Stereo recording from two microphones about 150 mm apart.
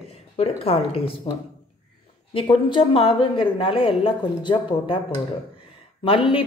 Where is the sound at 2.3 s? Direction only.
35° left (ahead or behind).